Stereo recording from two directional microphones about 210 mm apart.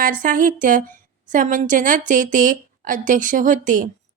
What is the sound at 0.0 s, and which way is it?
Speech, 40° right (ahead or behind).